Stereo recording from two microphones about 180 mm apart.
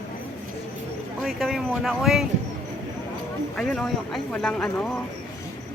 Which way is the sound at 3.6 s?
5° left (ahead or behind).